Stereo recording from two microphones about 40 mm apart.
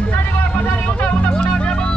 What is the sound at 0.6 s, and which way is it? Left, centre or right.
Music, left.